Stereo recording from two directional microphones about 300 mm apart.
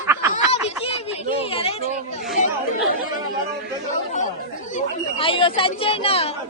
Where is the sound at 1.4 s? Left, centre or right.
Centre.